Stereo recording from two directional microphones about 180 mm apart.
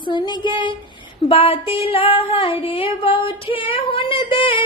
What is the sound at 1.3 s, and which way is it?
Female singing, 30° left (ahead or behind).